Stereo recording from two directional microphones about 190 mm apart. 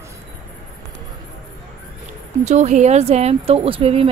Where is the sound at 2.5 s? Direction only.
35° right (ahead or behind).